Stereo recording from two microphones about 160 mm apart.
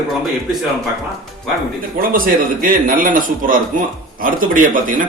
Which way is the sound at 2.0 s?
60° right (ahead or behind).